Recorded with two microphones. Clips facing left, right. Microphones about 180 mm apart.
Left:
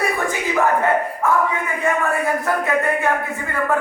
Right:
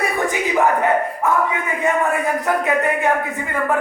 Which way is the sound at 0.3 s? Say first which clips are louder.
Right 3 dB; 15° right (ahead or behind).